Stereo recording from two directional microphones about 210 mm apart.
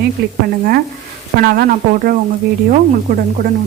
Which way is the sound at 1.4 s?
45° right (ahead or behind).